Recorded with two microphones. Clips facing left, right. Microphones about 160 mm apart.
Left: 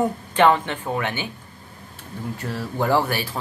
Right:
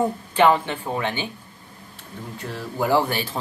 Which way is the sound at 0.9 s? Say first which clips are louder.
Even; 25° right (ahead or behind).